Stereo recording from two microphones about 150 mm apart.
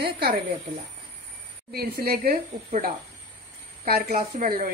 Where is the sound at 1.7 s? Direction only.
90° right.